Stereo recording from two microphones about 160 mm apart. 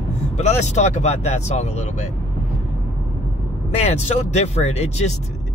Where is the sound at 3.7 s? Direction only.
40° left (ahead or behind).